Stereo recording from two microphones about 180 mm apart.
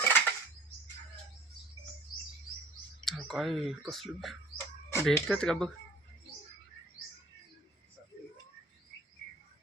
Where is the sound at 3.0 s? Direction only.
Centre (ahead or behind).